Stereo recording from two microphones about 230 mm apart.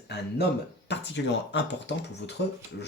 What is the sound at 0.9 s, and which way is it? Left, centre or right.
Speech, left.